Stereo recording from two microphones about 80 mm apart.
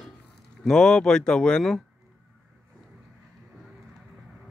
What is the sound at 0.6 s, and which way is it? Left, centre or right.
Speech, centre.